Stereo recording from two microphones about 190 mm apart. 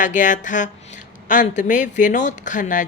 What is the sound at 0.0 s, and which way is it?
Speech, 40° left (ahead or behind).